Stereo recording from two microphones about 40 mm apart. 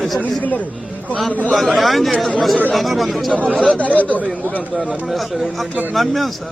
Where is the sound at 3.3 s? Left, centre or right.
Right.